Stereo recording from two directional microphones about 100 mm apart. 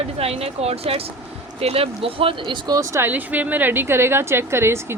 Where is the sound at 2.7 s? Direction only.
40° right (ahead or behind).